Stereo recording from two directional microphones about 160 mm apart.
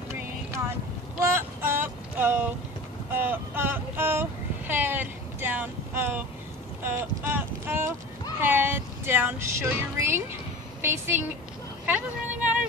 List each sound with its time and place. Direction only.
0.1 s vehicle: 15° right (ahead or behind)
1.2 s boat: 15° right (ahead or behind)
3.1 s vehicle: 10° right (ahead or behind)
6.8 s boat: 15° right (ahead or behind)
8.4 s a sound: 15° right (ahead or behind)
10.8 s a woman's voice: 15° right (ahead or behind)
11.8 s vehicle: 10° right (ahead or behind)